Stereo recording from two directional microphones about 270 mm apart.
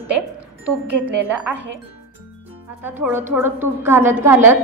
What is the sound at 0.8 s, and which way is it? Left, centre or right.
Speech, right.